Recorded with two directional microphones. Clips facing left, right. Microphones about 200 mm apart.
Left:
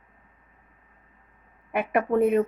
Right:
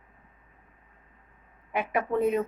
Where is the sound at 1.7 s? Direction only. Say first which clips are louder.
Left 4 dB; 60° left (ahead or behind).